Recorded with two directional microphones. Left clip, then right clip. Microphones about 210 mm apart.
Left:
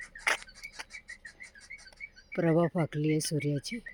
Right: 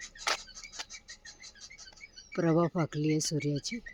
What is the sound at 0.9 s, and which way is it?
Bird, 35° left (ahead or behind).